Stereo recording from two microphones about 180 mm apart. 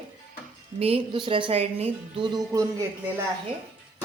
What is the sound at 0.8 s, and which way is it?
Speech, 35° right (ahead or behind).